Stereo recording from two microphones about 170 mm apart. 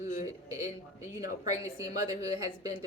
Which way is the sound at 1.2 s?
20° right (ahead or behind).